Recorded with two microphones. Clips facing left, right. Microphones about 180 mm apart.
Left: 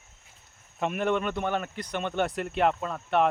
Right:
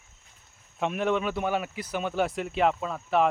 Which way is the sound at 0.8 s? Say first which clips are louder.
Even; centre (ahead or behind).